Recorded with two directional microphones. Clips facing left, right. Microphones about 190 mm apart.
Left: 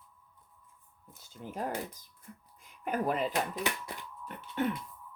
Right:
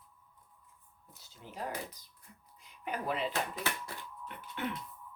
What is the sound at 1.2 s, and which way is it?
Speech, 50° left (ahead or behind).